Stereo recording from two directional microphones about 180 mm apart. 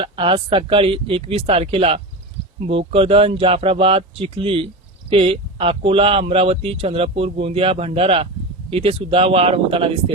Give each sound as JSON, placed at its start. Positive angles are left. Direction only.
{"t": 0.0, "sound": "speech", "side_deg": -30}